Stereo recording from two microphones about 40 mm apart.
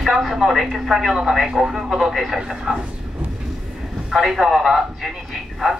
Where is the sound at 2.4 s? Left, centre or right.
Centre.